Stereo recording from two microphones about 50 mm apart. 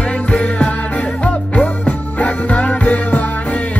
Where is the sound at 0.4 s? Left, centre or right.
Left.